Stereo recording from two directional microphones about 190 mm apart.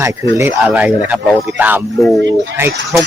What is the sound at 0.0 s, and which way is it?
Speech, 15° right (ahead or behind).